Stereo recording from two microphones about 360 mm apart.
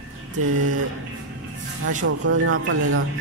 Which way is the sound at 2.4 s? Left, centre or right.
Right.